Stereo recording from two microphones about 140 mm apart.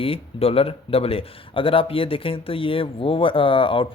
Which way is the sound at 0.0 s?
40° left (ahead or behind).